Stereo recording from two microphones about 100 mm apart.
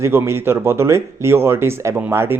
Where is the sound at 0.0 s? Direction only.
25° right (ahead or behind).